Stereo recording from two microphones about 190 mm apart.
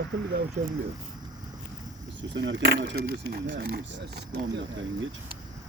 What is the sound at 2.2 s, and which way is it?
Speech, 75° right (ahead or behind).